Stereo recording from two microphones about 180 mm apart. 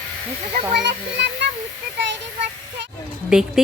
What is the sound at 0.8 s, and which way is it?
Speech, 70° right (ahead or behind).